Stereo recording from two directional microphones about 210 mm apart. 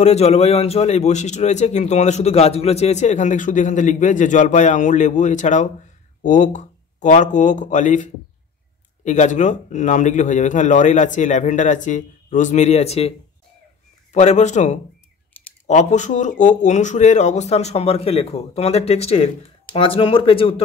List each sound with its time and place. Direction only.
0.0 s a man's voice: 30° left (ahead or behind)
14.1 s a man's voice: 35° left (ahead or behind)